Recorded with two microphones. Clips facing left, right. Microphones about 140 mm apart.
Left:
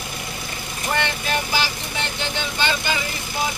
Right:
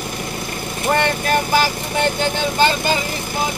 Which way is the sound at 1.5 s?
50° right (ahead or behind).